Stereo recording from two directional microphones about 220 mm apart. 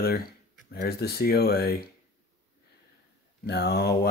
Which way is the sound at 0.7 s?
45° left (ahead or behind).